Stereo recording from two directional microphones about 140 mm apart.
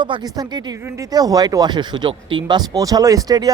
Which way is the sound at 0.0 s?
30° right (ahead or behind).